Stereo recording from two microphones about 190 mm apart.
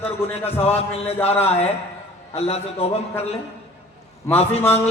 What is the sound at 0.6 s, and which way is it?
Mantra, 30° left (ahead or behind).